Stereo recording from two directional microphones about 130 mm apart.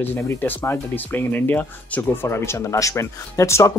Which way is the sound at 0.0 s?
15° left (ahead or behind).